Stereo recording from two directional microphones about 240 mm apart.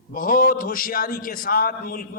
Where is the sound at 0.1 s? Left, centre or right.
Left.